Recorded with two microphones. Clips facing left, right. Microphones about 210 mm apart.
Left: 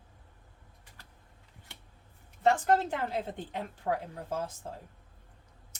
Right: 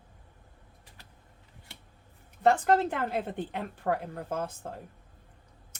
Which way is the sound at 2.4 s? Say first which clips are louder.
Right 2 dB; 55° right (ahead or behind).